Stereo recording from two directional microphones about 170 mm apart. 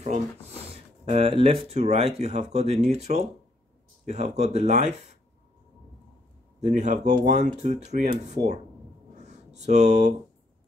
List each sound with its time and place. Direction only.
0.0 s speech: 40° right (ahead or behind)
6.6 s speech: 45° right (ahead or behind)
9.1 s a sound: 40° right (ahead or behind)